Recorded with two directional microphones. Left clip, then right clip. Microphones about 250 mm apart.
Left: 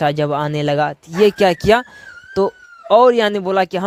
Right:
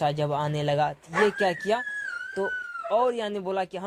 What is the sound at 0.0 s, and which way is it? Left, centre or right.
Speech, left.